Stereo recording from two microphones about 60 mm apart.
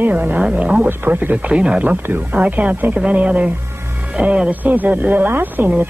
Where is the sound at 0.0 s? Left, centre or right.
Right.